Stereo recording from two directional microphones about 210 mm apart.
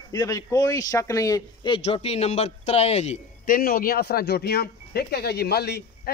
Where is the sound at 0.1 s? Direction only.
20° left (ahead or behind).